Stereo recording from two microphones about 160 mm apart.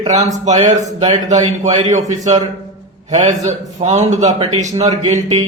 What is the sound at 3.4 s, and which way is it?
Speech, 45° right (ahead or behind).